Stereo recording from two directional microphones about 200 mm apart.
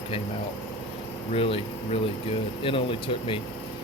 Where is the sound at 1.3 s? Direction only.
30° left (ahead or behind).